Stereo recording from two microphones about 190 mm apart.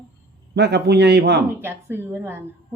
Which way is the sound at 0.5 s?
60° right (ahead or behind).